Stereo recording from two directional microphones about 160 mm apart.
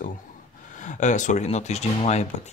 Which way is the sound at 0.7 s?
50° left (ahead or behind).